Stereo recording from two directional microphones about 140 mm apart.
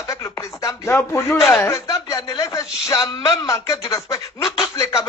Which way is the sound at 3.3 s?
25° left (ahead or behind).